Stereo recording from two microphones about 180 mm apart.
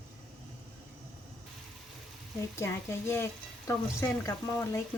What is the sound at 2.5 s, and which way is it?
Speech, 15° left (ahead or behind).